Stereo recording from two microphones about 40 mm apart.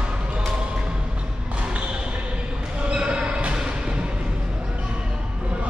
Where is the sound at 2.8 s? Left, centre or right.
Right.